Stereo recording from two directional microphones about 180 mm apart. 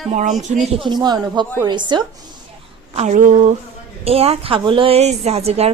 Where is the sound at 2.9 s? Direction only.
45° right (ahead or behind).